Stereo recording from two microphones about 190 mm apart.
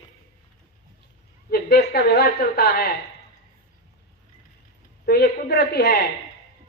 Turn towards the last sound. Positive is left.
turn(degrees=60)  # may be behind; listen again after turning